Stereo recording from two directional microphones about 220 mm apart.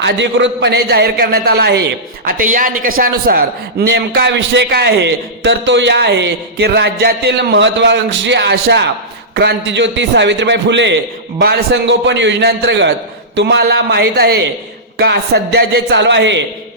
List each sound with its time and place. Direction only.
0.0 s a man's voice: 55° right (ahead or behind)